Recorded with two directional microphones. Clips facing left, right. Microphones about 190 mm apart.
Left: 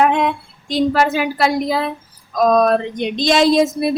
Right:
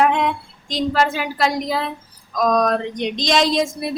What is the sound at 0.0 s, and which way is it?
Female singing, 15° left (ahead or behind).